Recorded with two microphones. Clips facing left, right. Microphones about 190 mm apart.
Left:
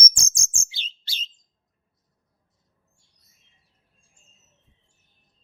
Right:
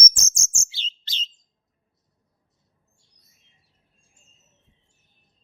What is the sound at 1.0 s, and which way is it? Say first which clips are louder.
Bird: right 3 dB; 10° left (ahead or behind).